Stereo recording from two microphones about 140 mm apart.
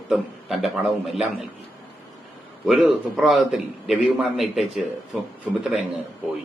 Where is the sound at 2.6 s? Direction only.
5° right (ahead or behind).